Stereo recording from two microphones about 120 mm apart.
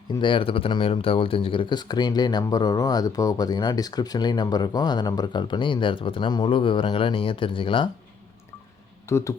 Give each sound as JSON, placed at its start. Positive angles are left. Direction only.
{"t": 0.2, "sound": "speech", "side_deg": 45}
{"t": 9.0, "sound": "speech", "side_deg": 25}